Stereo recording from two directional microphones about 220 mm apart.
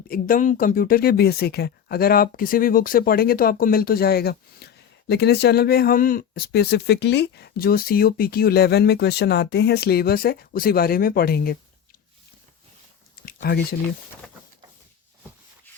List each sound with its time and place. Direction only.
0.1 s speech: 40° left (ahead or behind)
13.2 s speech: 45° left (ahead or behind)